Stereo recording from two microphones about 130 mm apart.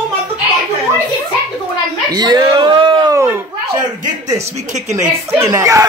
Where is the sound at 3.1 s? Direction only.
20° right (ahead or behind).